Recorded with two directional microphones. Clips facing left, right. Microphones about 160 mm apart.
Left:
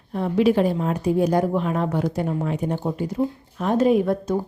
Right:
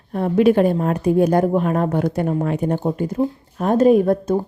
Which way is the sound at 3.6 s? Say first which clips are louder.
Right 4 dB; 45° right (ahead or behind).